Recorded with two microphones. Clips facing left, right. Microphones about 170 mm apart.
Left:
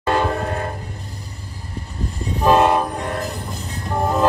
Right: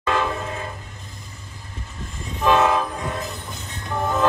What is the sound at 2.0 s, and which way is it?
Train, 35° left (ahead or behind).